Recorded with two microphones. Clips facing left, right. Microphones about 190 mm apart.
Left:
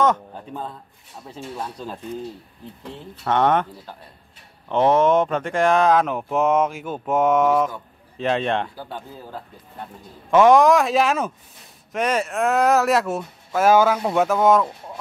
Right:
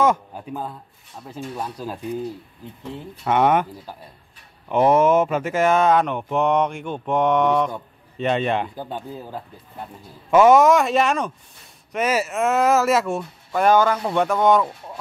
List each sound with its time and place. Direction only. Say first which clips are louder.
0.0 s speech: right 1 dB; 10° right (ahead or behind)
3.3 s speech: right 1 dB; 10° right (ahead or behind)
8.7 s speech: right 4 dB; 20° right (ahead or behind)
10.3 s speech: even; 5° right (ahead or behind)